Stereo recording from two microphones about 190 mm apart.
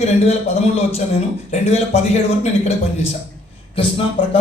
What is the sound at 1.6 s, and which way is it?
Speech, 35° left (ahead or behind).